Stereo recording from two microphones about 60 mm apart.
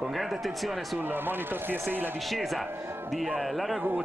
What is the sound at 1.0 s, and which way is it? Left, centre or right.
Speech, right.